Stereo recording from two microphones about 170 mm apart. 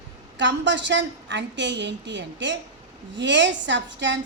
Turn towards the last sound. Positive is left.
turn(degrees=-90)